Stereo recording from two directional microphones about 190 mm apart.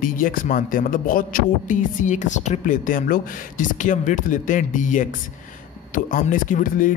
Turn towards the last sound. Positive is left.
turn(degrees=45)  # may be behind; listen again after turning